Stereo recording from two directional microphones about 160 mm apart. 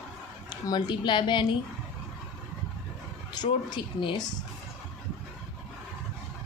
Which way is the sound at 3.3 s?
30° left (ahead or behind).